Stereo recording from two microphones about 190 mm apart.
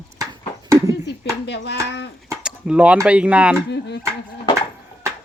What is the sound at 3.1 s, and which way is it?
Speech, 5° right (ahead or behind).